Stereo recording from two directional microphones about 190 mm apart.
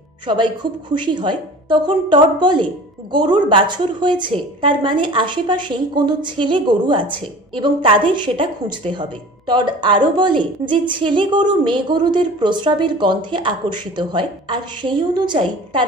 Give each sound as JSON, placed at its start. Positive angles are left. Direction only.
{"t": 0.3, "sound": "a woman's voice", "side_deg": -25}